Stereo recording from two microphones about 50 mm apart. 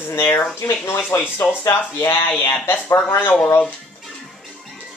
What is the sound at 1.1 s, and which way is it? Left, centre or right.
Speech, left.